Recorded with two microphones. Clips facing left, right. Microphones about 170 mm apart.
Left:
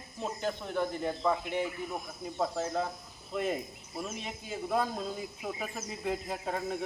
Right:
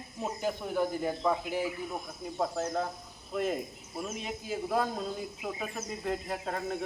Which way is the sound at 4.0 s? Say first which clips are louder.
Right 2 dB; centre (ahead or behind).